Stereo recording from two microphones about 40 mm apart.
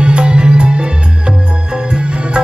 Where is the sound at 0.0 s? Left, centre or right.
Right.